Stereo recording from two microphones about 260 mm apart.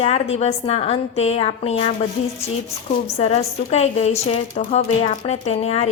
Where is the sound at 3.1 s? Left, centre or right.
Left.